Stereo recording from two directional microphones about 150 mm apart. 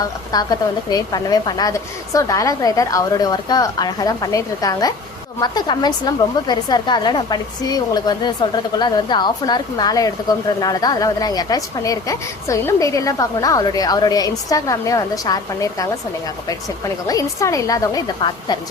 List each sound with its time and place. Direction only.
0.3 s a woman's voice: 25° left (ahead or behind)